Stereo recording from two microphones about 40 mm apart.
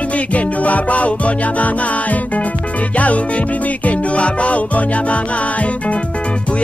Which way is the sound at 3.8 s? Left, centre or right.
Left.